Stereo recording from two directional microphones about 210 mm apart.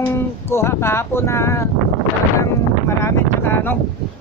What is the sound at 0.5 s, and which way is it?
Speech, 10° left (ahead or behind).